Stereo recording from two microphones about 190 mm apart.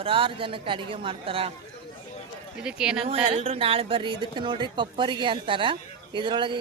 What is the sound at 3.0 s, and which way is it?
Speech, 30° right (ahead or behind).